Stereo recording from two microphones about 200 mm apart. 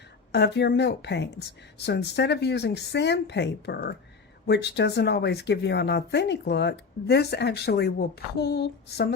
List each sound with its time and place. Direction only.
0.3 s speech: 55° left (ahead or behind)